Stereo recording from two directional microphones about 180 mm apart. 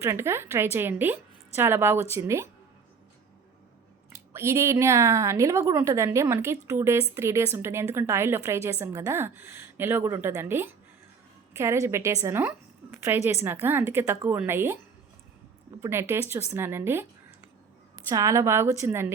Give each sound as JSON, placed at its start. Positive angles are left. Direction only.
{"t": 0.0, "sound": "a woman's voice", "side_deg": -15}
{"t": 4.1, "sound": "a woman's voice", "side_deg": -15}
{"t": 15.8, "sound": "a woman's voice", "side_deg": -15}
{"t": 18.1, "sound": "a woman's voice", "side_deg": -15}